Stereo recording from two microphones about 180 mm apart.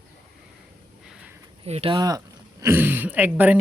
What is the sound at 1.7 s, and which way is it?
Speech, 35° right (ahead or behind).